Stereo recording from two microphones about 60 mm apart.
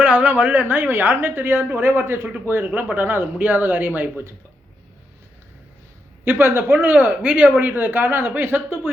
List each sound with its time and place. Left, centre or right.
0.0 s a woman's voice: right
6.4 s a woman's voice: right